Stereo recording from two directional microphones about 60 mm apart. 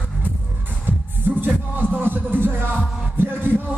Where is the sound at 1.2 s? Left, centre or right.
Right.